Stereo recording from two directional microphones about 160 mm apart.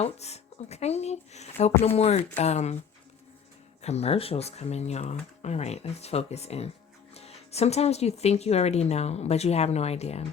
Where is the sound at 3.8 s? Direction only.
40° left (ahead or behind).